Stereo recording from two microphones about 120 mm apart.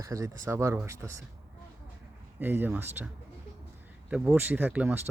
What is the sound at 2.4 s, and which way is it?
Speech, 15° right (ahead or behind).